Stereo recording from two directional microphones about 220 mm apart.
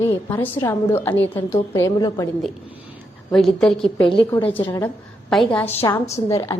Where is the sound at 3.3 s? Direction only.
Centre (ahead or behind).